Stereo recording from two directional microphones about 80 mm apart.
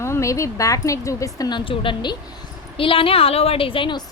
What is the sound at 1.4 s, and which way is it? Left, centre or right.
A woman's voice, left.